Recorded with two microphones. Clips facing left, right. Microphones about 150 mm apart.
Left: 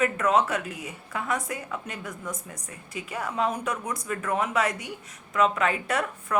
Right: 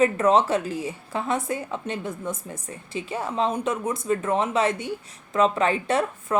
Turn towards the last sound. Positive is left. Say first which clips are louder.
# right 5 dB
turn(degrees=-30)  # may be behind; listen again after turning